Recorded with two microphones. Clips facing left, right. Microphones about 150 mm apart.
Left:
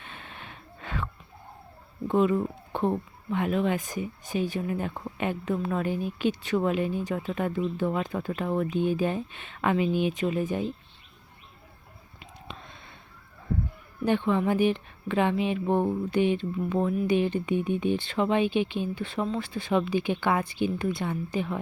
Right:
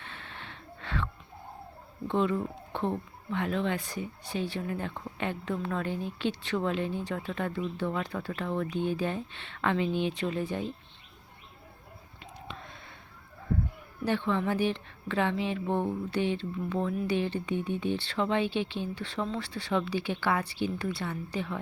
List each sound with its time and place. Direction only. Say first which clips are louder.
0.0 s a sound: left 1 dB; 15° left (ahead or behind)
2.0 s a woman's voice: left 5 dB; 10° left (ahead or behind)
12.5 s whispering: left 1 dB; 20° left (ahead or behind)
14.0 s a woman's voice: left 4 dB; 15° left (ahead or behind)